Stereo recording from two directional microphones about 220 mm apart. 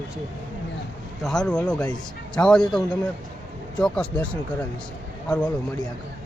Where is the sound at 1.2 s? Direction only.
5° left (ahead or behind).